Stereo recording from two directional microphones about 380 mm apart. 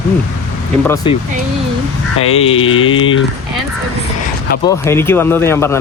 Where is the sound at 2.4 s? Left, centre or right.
Centre.